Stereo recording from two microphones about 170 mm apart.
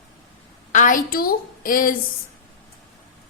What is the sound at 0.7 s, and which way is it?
A woman's voice, 50° left (ahead or behind).